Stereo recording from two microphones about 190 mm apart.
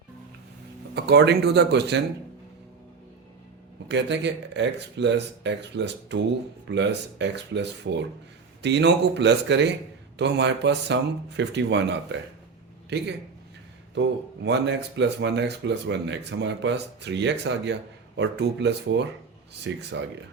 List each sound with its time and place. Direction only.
0.9 s speech: 60° right (ahead or behind)
3.8 s speech: 65° right (ahead or behind)
13.9 s speech: 70° right (ahead or behind)